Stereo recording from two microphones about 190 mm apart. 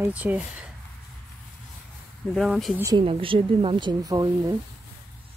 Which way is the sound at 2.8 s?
15° right (ahead or behind).